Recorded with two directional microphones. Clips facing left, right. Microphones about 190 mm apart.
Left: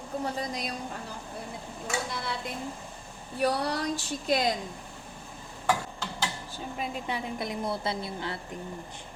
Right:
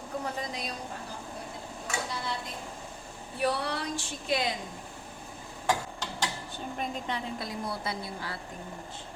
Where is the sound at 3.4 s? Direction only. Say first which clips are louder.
Left 3 dB; 40° left (ahead or behind).